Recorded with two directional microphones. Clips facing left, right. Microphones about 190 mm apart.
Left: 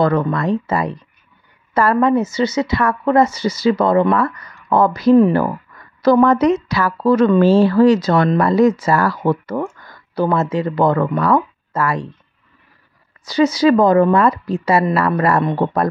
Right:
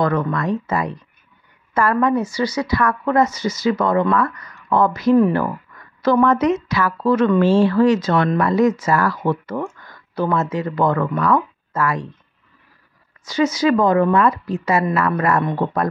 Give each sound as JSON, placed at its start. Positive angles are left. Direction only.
{"t": 0.0, "sound": "a woman's voice", "side_deg": 30}
{"t": 13.2, "sound": "a woman's voice", "side_deg": 35}